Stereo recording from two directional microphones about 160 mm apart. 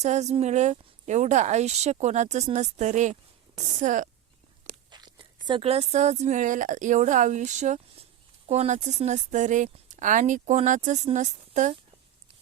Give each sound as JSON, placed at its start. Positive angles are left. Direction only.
{"t": 0.0, "sound": "speech", "side_deg": -45}
{"t": 4.9, "sound": "speech", "side_deg": -30}